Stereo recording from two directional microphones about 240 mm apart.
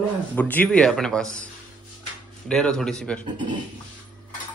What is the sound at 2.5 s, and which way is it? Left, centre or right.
Speech, centre.